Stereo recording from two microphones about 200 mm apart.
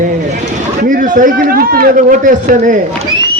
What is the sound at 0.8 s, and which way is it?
A man's voice, 40° right (ahead or behind).